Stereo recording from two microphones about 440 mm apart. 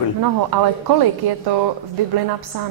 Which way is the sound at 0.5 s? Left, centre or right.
Right.